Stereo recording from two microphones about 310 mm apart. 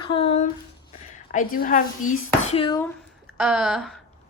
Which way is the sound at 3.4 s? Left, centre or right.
Centre.